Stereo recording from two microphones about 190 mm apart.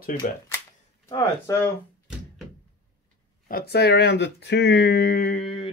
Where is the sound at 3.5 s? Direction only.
55° left (ahead or behind).